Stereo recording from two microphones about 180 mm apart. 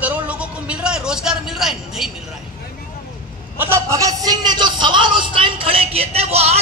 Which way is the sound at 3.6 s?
15° right (ahead or behind).